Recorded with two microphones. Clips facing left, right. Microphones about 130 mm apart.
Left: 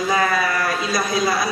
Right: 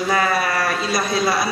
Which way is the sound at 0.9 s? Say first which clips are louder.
Even; 25° right (ahead or behind).